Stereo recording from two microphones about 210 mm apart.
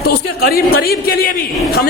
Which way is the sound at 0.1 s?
45° left (ahead or behind).